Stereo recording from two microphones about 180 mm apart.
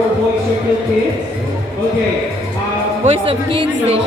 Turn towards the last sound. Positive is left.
turn(degrees=-30)  # may be behind; listen again after turning